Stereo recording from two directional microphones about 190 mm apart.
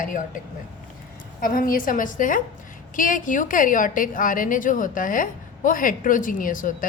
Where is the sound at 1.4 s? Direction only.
50° left (ahead or behind).